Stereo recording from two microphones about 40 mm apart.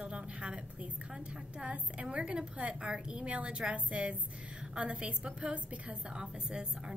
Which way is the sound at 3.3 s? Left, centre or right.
Right.